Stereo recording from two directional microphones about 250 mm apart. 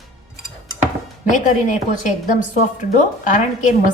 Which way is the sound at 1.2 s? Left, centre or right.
Left.